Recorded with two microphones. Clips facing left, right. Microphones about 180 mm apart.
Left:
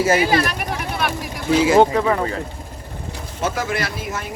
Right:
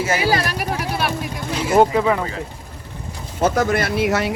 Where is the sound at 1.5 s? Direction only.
90° left.